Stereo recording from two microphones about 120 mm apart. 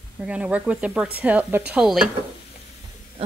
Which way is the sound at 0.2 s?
10° right (ahead or behind).